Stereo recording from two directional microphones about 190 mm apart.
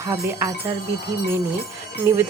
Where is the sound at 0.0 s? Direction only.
10° right (ahead or behind).